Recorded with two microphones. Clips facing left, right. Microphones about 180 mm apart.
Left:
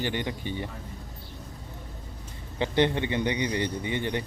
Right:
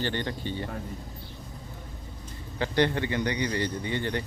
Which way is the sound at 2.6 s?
20° left (ahead or behind).